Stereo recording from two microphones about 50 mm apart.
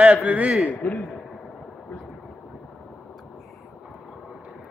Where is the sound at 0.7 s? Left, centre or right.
Left.